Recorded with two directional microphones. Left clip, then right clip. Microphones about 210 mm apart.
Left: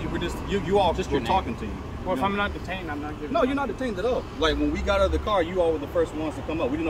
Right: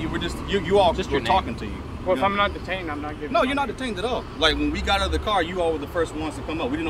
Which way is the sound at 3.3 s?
25° right (ahead or behind).